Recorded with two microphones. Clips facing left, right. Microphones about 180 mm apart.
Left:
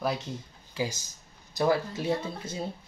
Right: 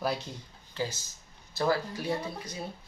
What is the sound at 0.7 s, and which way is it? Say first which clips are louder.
Speech: left 2 dB; 15° left (ahead or behind).